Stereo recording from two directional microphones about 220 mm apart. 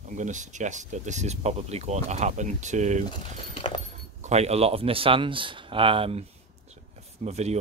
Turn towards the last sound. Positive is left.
turn(degrees=-30)  # may be behind; listen again after turning